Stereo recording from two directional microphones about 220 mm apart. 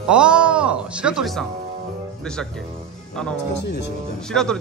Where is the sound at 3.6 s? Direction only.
50° left (ahead or behind).